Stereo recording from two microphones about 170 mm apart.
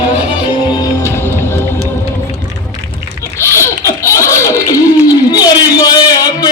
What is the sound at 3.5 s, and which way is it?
Baby laughter, 15° left (ahead or behind).